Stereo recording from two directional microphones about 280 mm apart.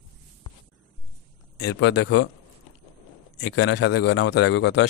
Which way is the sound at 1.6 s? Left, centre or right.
Left.